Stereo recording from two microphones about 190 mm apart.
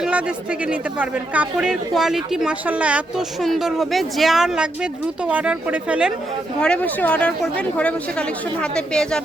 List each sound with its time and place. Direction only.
0.0 s speech: 5° right (ahead or behind)
6.6 s speech: 5° left (ahead or behind)